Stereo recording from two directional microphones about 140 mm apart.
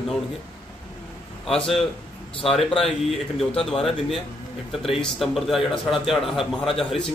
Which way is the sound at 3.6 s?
5° left (ahead or behind).